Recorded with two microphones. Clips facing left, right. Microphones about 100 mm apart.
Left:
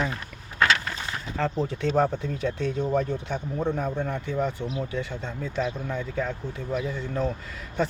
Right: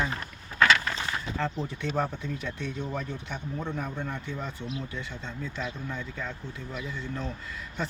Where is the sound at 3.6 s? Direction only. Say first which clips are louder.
Left 8 dB; 40° left (ahead or behind).